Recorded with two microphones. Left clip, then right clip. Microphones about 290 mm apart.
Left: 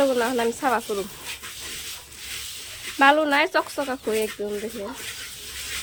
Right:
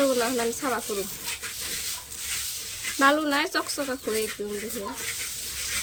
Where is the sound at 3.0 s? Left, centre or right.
Centre.